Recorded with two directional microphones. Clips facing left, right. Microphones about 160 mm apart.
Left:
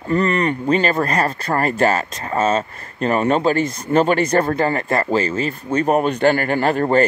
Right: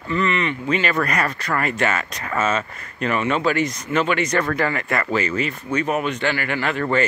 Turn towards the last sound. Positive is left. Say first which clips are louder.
# left 5 dB
turn(degrees=40)  # may be behind; listen again after turning